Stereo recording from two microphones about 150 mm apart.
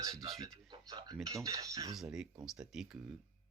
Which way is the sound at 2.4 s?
5° right (ahead or behind).